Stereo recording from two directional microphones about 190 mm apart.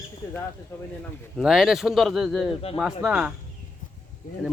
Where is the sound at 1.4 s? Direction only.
5° right (ahead or behind).